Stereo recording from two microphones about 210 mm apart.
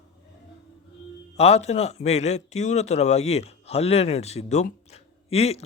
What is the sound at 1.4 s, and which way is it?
A man's voice, 30° left (ahead or behind).